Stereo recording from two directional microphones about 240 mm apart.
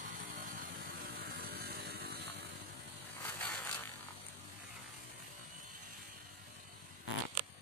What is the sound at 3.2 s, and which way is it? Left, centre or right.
Electric shaver, centre.